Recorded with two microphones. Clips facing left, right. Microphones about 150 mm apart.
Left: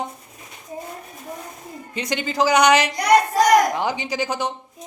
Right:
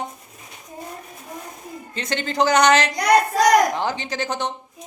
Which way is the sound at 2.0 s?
10° left (ahead or behind).